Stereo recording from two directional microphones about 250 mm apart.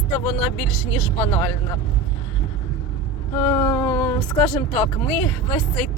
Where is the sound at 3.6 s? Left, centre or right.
Centre.